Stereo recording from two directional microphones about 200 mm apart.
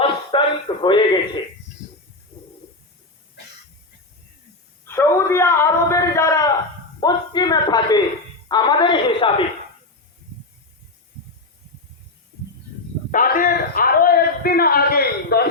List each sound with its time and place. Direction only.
0.0 s a sound: 25° left (ahead or behind)
4.9 s a man's voice: 10° left (ahead or behind)
13.1 s a man's voice: 45° left (ahead or behind)